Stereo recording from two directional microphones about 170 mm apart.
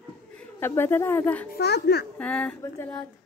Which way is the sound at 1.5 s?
70° left (ahead or behind).